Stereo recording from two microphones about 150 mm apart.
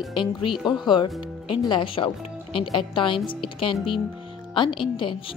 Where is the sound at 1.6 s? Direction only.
35° left (ahead or behind).